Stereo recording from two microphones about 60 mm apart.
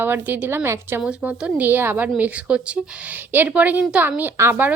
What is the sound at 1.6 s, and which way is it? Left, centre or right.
A woman's voice, right.